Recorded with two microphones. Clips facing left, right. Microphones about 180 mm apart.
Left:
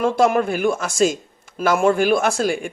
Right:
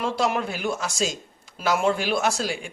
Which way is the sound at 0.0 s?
50° left (ahead or behind).